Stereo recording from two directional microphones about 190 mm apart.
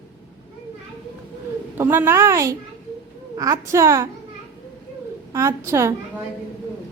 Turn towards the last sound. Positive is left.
turn(degrees=-15)  # may be behind; listen again after turning